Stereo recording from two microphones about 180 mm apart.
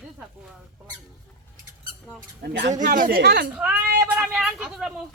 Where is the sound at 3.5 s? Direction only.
5° right (ahead or behind).